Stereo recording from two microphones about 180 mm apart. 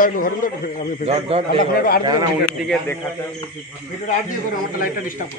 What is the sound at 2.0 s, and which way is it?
Speech, 20° right (ahead or behind).